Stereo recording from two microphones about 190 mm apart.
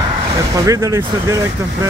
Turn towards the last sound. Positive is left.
turn(degrees=-15)  # may be behind; listen again after turning